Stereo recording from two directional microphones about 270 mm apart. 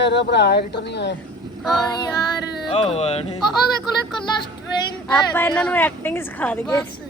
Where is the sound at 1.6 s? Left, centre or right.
Centre.